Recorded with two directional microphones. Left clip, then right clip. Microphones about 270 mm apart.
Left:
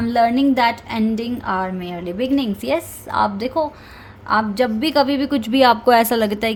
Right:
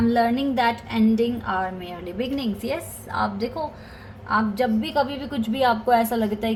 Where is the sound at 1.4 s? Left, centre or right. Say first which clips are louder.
Left 4 dB; left.